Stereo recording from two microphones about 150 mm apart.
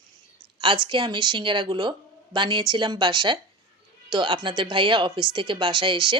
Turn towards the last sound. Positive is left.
turn(degrees=-35)  # may be behind; listen again after turning